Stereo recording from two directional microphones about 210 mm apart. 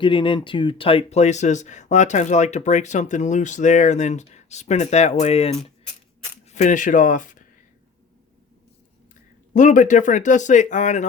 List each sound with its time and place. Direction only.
0.0 s speech: 25° left (ahead or behind)
9.5 s speech: 35° left (ahead or behind)